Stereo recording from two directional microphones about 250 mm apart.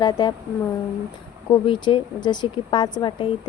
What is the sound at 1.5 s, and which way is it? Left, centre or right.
Speech, centre.